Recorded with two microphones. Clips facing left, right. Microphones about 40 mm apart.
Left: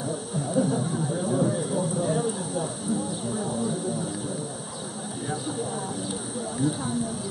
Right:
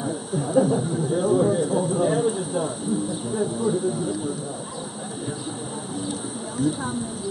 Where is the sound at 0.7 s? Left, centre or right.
Centre.